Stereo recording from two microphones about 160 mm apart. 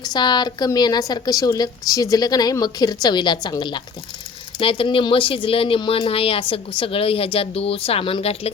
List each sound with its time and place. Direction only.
0.0 s a woman's voice: 25° left (ahead or behind)